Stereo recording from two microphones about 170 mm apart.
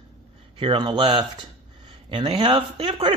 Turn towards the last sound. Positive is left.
turn(degrees=-30)  # may be behind; listen again after turning